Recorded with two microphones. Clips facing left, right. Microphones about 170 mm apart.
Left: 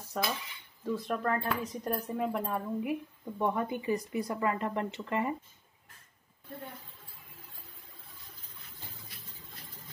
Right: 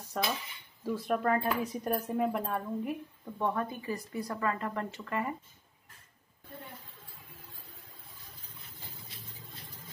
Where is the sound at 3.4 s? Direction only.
15° left (ahead or behind).